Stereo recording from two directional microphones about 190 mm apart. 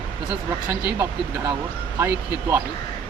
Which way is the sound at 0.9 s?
20° right (ahead or behind).